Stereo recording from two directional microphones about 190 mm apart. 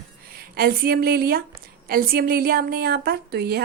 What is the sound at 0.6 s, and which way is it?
A woman's voice, 50° right (ahead or behind).